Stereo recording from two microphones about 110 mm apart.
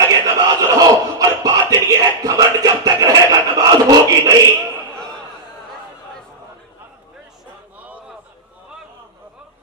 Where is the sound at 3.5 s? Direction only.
35° right (ahead or behind).